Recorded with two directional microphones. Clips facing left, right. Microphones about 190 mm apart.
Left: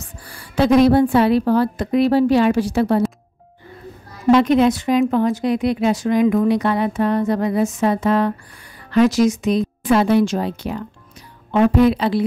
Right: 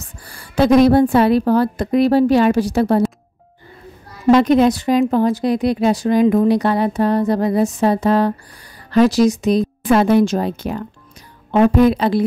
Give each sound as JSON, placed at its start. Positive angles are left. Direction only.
{"t": 0.3, "sound": "a woman's voice", "side_deg": -45}
{"t": 4.3, "sound": "a woman's voice", "side_deg": -40}